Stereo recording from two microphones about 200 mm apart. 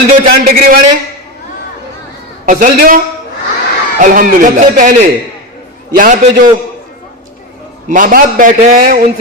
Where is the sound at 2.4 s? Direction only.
40° right (ahead or behind).